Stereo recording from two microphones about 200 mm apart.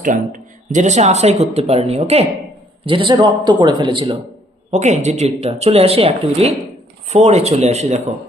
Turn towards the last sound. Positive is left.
turn(degrees=-35)  # may be behind; listen again after turning